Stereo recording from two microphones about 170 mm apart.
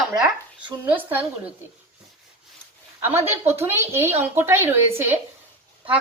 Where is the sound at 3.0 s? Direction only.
15° right (ahead or behind).